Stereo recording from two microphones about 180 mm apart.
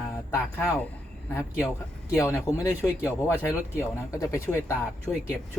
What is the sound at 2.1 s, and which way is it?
Speech, 15° left (ahead or behind).